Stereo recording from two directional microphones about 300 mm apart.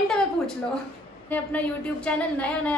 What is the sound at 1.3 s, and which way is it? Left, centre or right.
A woman's voice, centre.